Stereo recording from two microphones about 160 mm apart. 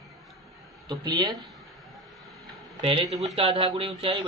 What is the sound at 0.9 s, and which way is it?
Speech, 25° right (ahead or behind).